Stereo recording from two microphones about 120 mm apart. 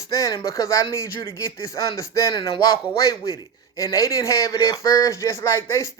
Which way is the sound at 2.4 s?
45° left (ahead or behind).